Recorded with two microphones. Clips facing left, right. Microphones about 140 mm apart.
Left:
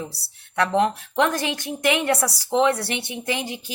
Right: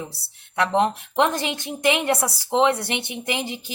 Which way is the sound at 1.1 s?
20° right (ahead or behind).